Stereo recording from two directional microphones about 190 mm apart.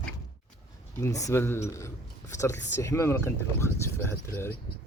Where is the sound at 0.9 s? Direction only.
15° left (ahead or behind).